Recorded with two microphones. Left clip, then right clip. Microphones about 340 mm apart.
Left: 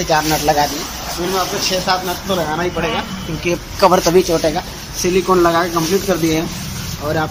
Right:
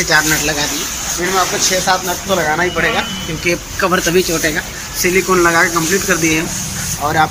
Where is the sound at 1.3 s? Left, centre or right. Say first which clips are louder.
Right 3 dB; centre.